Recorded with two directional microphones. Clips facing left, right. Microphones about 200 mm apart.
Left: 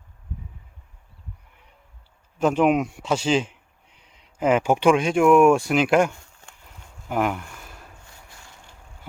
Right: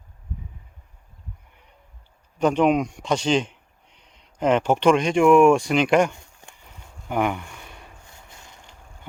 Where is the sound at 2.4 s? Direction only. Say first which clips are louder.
Even; 5° left (ahead or behind).